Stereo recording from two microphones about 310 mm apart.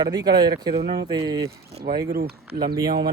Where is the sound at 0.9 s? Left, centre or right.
Centre.